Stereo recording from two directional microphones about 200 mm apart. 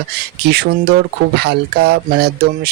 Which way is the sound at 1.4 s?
55° right (ahead or behind).